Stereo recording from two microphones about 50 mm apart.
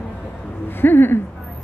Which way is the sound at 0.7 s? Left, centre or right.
Left.